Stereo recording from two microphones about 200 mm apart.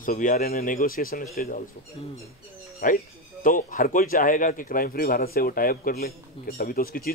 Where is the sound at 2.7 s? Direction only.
45° left (ahead or behind).